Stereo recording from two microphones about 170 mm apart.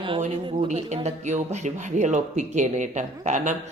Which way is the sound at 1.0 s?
40° right (ahead or behind).